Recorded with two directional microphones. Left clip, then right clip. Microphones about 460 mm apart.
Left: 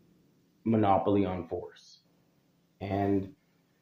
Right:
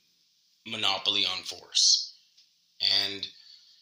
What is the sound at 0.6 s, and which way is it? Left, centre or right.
Speech, left.